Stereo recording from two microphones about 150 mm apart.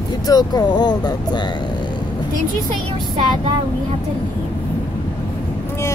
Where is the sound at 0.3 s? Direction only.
25° left (ahead or behind).